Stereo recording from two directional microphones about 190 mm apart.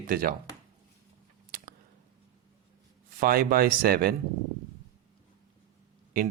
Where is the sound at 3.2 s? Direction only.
50° right (ahead or behind).